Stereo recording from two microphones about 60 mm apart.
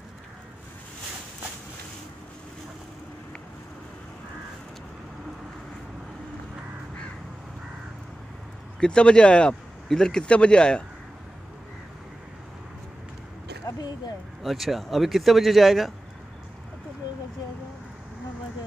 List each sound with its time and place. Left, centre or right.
8.7 s speech: centre
13.7 s a sound: left
14.4 s a man's voice: centre